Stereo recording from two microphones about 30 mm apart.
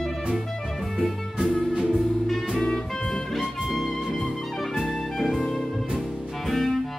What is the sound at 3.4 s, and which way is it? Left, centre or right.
Music, centre.